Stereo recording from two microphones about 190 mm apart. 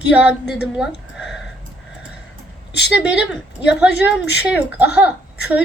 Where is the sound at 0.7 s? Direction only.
5° right (ahead or behind).